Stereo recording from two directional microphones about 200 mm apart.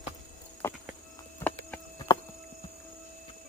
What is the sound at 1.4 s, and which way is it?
Clip-clop, 10° left (ahead or behind).